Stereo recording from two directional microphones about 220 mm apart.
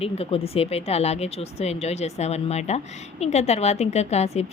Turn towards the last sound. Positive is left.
turn(degrees=30)  # may be behind; listen again after turning